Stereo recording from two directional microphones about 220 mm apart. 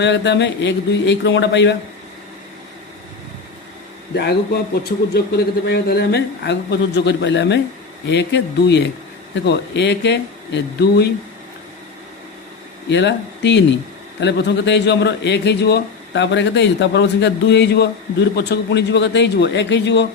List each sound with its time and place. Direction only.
0.0 s a man's voice: 55° left (ahead or behind)
4.1 s a man's voice: 50° left (ahead or behind)
12.9 s a man's voice: 50° left (ahead or behind)